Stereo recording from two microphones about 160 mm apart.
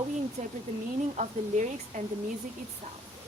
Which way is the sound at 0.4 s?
45° right (ahead or behind).